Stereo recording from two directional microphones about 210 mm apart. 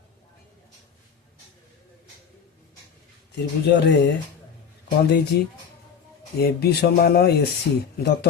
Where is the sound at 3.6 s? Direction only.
55° left (ahead or behind).